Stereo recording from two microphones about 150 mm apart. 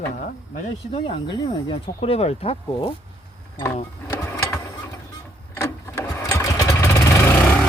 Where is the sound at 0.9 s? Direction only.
35° left (ahead or behind).